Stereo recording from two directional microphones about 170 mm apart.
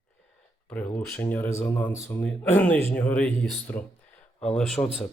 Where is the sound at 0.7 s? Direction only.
10° left (ahead or behind).